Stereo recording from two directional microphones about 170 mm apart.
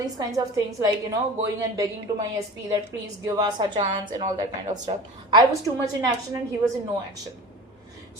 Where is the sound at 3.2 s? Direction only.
20° right (ahead or behind).